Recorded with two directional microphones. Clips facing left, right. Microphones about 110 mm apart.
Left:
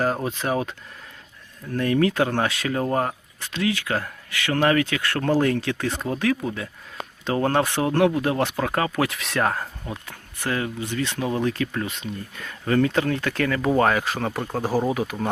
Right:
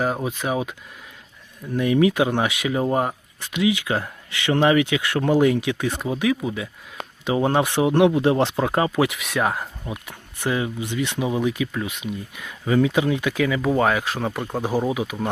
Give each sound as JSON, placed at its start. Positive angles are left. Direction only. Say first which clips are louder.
{"t": 0.0, "sound": "speech", "louder": "even", "side_deg": -5}
{"t": 9.1, "sound": "speech", "louder": "even", "side_deg": -5}